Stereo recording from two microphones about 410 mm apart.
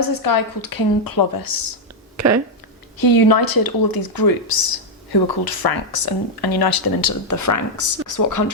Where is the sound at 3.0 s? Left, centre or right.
Left.